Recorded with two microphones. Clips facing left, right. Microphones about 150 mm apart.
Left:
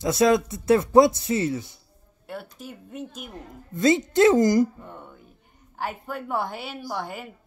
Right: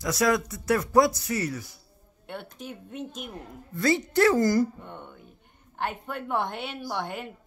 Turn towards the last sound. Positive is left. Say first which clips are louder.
# even
turn(degrees=5)  # may be behind; listen again after turning